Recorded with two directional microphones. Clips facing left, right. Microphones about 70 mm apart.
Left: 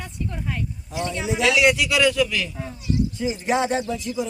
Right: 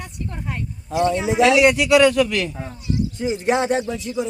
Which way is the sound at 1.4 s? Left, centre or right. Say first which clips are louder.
Right 4 dB; right.